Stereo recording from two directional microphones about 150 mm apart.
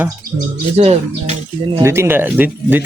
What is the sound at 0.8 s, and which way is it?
Speech, 45° right (ahead or behind).